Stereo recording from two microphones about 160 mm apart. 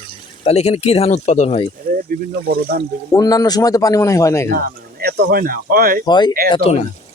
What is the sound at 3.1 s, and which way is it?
A man's voice, 20° left (ahead or behind).